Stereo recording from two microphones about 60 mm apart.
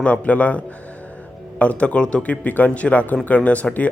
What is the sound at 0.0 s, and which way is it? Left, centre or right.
Speech, left.